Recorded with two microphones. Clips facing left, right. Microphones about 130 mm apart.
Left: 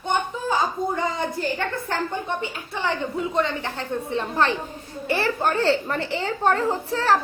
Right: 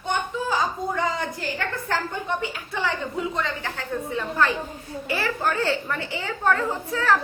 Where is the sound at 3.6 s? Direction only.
25° left (ahead or behind).